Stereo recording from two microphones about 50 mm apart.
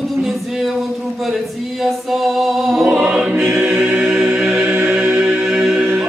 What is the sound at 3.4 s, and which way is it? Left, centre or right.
Choir, right.